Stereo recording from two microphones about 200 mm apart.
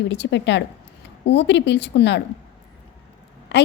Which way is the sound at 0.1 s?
60° left (ahead or behind).